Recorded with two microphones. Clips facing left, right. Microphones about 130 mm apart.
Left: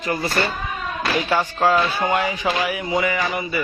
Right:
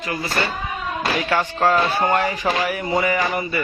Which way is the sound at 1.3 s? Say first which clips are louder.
Even; 5° left (ahead or behind).